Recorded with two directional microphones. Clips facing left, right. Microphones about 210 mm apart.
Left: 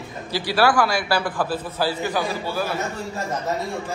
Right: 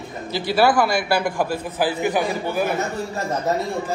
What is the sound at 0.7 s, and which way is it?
A man's voice, 15° right (ahead or behind).